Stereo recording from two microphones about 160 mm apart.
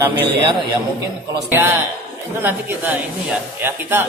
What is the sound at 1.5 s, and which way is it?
Speech, 15° right (ahead or behind).